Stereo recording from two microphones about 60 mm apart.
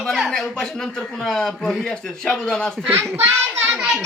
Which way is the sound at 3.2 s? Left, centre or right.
Right.